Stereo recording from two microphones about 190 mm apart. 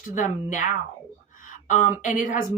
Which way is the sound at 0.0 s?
45° left (ahead or behind).